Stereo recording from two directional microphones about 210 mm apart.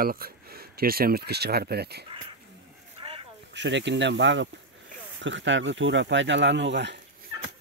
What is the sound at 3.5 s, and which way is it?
Speech, 55° right (ahead or behind).